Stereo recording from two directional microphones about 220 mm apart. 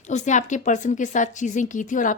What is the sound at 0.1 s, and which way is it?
A woman's voice, 35° left (ahead or behind).